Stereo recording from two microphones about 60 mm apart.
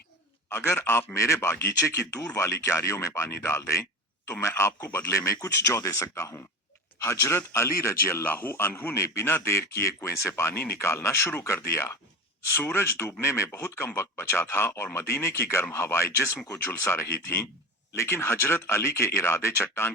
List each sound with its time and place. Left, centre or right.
0.5 s speech: left
3.2 s speech: left
5.1 s speech: left
8.1 s a man's voice: left
9.0 s speech: left
13.2 s speech: left
13.6 s speech: left